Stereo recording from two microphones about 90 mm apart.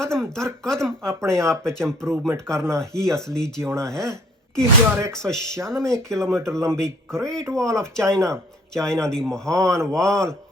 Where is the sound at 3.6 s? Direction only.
35° right (ahead or behind).